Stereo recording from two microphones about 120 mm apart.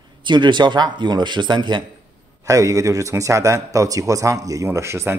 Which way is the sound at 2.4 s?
25° right (ahead or behind).